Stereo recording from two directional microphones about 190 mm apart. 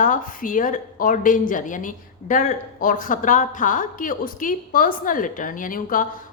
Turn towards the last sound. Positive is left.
turn(degrees=45)  # may be behind; listen again after turning